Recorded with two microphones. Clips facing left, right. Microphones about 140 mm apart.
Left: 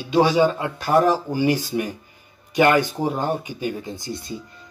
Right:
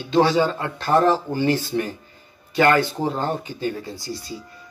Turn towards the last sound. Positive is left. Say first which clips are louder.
# left 1 dB
turn(degrees=20)  # may be behind; listen again after turning